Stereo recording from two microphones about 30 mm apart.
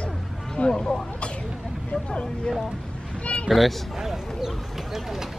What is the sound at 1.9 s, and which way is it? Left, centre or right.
Speech, left.